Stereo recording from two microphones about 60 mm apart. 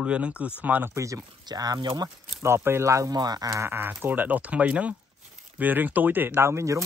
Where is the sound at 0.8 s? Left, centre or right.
Right.